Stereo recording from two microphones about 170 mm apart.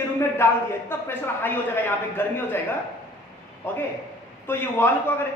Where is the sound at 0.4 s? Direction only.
15° left (ahead or behind).